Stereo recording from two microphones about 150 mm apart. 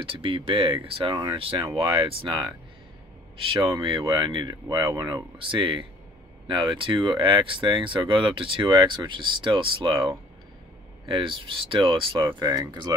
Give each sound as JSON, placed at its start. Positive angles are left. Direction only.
{"t": 0.0, "sound": "speech", "side_deg": -35}